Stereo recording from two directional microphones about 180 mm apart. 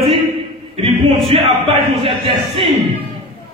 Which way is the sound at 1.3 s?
30° right (ahead or behind).